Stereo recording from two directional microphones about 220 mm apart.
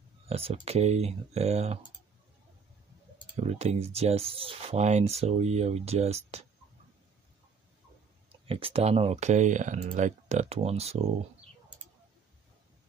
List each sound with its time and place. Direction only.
0.3 s speech: 25° right (ahead or behind)
3.3 s speech: 30° right (ahead or behind)
8.3 s speech: 25° right (ahead or behind)